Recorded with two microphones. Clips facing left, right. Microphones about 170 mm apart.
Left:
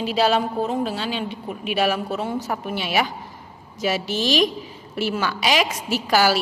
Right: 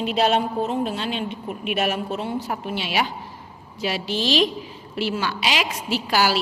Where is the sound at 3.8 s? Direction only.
45° left (ahead or behind).